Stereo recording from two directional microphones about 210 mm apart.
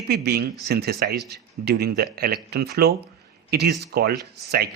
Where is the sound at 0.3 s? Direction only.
50° right (ahead or behind).